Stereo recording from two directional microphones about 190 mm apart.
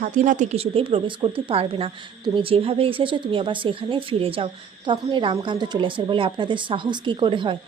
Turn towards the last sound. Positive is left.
turn(degrees=-25)  # may be behind; listen again after turning